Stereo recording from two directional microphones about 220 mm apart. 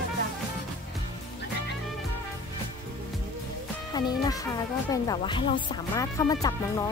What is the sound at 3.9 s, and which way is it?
Speech, 15° left (ahead or behind).